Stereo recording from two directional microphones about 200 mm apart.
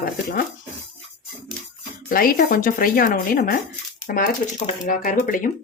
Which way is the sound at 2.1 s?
45° left (ahead or behind).